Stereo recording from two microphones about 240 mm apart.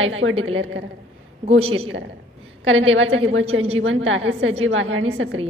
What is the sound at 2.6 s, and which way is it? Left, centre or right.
A woman's voice, right.